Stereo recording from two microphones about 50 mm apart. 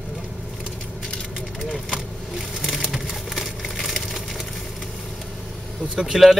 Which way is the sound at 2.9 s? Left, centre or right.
Centre.